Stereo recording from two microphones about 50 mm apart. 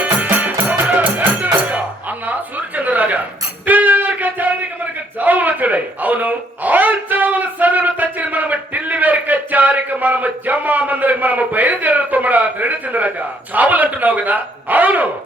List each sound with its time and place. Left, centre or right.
0.0 s music: right
5.1 s speech: right